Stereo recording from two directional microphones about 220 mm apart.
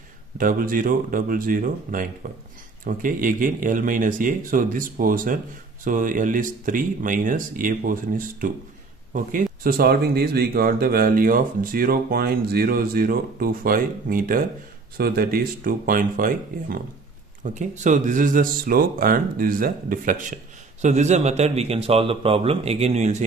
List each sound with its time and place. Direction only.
0.4 s a man's voice: 40° right (ahead or behind)